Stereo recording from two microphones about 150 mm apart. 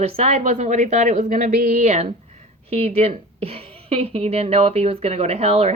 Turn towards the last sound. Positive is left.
turn(degrees=-45)  # may be behind; listen again after turning